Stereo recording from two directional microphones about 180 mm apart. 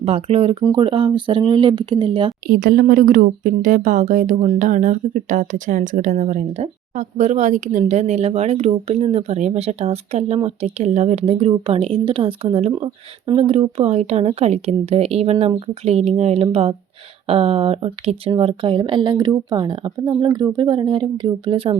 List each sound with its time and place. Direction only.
0.0 s a woman's voice: 35° right (ahead or behind)
2.5 s a woman's voice: 55° right (ahead or behind); by 21.8 s 30° right (ahead or behind)